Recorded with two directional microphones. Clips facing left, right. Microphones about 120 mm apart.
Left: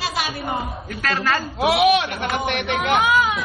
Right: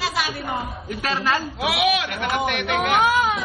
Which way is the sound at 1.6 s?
35° left (ahead or behind).